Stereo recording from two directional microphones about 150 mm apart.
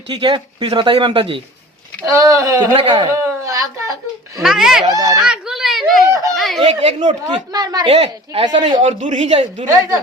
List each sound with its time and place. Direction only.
0.1 s speech: 30° right (ahead or behind)
2.2 s speech: 20° right (ahead or behind)
2.7 s speech: 35° right (ahead or behind)
3.2 s a sound: 20° right (ahead or behind)
4.4 s speech: 5° right (ahead or behind)
4.9 s speech: 25° right (ahead or behind)
5.1 s a child's voice: 5° right (ahead or behind)
6.1 s speech: 20° right (ahead or behind)
6.3 s a sound: centre (ahead or behind)
6.6 s speech: 40° right (ahead or behind)
7.9 s speech: 40° right (ahead or behind)
8.9 s speech: 55° right (ahead or behind)